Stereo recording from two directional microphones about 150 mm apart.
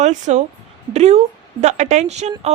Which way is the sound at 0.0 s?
50° right (ahead or behind).